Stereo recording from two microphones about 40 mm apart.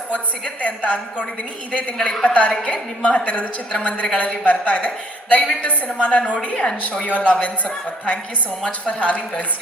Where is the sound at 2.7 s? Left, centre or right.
Left.